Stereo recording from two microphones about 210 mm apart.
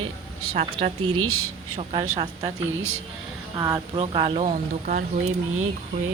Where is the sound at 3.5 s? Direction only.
15° right (ahead or behind).